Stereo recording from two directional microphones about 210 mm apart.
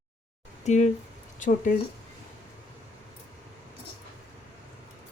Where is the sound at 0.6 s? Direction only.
35° left (ahead or behind).